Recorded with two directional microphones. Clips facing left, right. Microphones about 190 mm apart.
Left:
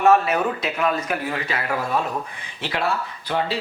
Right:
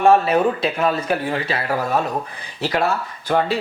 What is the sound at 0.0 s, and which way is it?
A man's voice, 30° right (ahead or behind).